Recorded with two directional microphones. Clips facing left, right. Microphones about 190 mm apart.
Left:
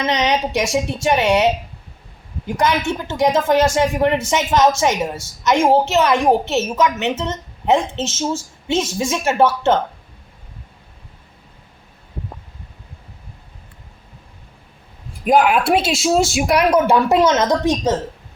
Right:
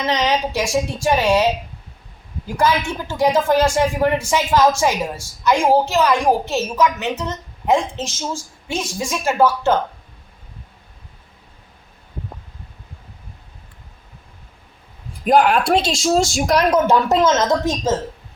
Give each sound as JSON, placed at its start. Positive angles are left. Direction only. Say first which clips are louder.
{"t": 0.0, "sound": "a woman's voice", "louder": "left 1 dB", "side_deg": 20}
{"t": 2.5, "sound": "a woman's voice", "louder": "even", "side_deg": 20}
{"t": 15.2, "sound": "speech", "louder": "even", "side_deg": 0}